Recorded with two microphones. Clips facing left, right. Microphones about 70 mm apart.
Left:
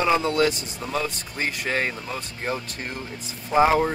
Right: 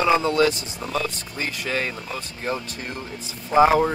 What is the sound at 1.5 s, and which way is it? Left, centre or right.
Speech, centre.